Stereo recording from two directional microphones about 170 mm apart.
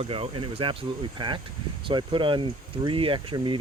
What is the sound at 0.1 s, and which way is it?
Speech, 30° right (ahead or behind).